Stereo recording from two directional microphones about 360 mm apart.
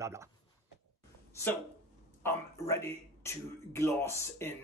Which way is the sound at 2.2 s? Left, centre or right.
Centre.